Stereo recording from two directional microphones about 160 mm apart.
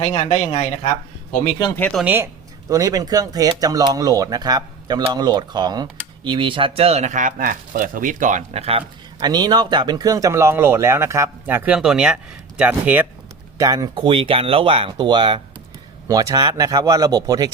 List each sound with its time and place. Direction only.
0.0 s speech: 45° left (ahead or behind)
2.0 s speech: 15° right (ahead or behind); by 8.8 s 40° right (ahead or behind)
9.2 s speech: 25° right (ahead or behind); by 13.1 s 10° right (ahead or behind)
13.6 s speech: 25° right (ahead or behind)